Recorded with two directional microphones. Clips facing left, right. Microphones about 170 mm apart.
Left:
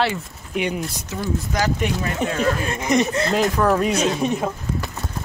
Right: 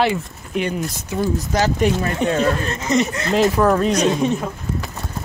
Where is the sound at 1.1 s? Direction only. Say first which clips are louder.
Right 4 dB; 35° right (ahead or behind).